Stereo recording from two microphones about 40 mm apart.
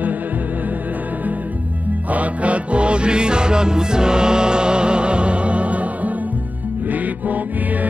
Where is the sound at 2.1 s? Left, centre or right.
Right.